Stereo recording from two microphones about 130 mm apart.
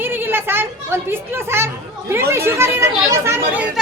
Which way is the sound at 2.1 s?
20° right (ahead or behind).